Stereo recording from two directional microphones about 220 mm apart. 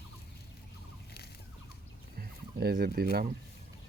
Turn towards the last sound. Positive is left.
turn(degrees=-45)  # may be behind; listen again after turning